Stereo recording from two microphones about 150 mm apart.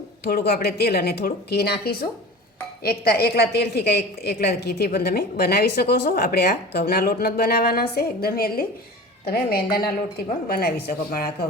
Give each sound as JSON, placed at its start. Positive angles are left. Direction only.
{"t": 0.3, "sound": "a woman's voice", "side_deg": 90}